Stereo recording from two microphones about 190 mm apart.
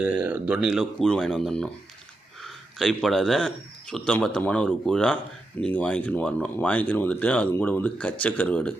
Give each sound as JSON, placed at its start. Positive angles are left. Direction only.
{"t": 0.0, "sound": "speech", "side_deg": -5}